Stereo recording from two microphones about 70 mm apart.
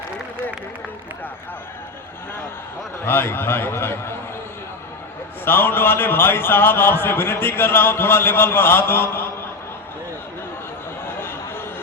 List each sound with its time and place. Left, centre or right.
3.0 s a man's voice: left
5.5 s a man's voice: left
11.0 s a sound: left